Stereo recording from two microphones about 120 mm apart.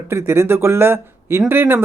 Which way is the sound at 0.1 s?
20° right (ahead or behind).